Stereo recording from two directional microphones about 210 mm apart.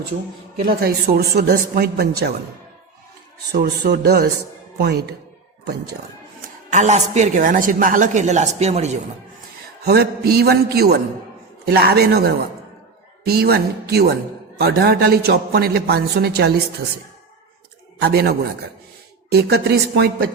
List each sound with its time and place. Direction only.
0.6 s a man's voice: 45° right (ahead or behind)
3.5 s a man's voice: 50° right (ahead or behind)
6.7 s a woman's voice: 35° right (ahead or behind)
9.8 s a man's voice: 45° right (ahead or behind)
13.2 s a man's voice: 50° right (ahead or behind)
18.0 s a man's voice: 50° right (ahead or behind)